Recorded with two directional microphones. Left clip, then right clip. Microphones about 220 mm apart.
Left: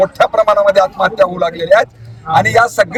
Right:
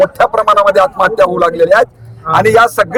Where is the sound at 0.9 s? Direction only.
30° right (ahead or behind).